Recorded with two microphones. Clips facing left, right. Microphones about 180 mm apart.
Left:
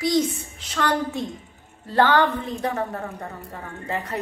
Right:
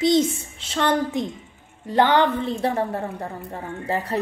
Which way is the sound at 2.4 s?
30° right (ahead or behind).